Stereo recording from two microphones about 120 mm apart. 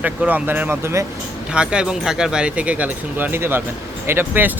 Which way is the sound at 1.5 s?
10° right (ahead or behind).